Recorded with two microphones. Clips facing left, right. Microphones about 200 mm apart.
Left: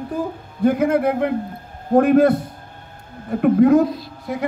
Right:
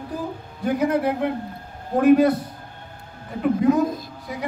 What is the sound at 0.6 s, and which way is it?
A man's voice, 50° left (ahead or behind).